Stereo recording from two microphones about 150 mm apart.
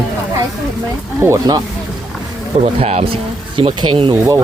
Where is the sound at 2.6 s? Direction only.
45° right (ahead or behind).